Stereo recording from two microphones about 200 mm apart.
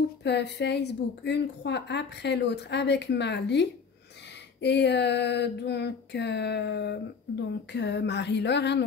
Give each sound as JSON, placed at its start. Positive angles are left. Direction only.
{"t": 0.2, "sound": "a woman's voice", "side_deg": 60}